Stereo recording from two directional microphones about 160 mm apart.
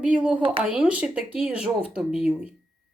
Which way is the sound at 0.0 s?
5° right (ahead or behind).